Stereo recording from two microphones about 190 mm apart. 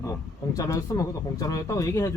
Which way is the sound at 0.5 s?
20° left (ahead or behind).